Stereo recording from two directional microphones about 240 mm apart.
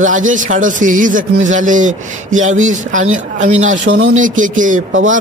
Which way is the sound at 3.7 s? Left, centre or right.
Right.